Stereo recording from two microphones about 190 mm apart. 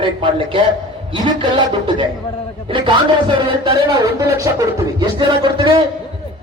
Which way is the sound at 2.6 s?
25° right (ahead or behind).